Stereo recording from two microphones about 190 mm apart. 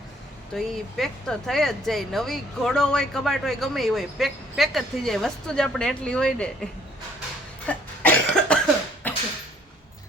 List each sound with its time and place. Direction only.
0.5 s speech: centre (ahead or behind)
7.7 s cough: 5° left (ahead or behind)
9.0 s a sound: 10° left (ahead or behind)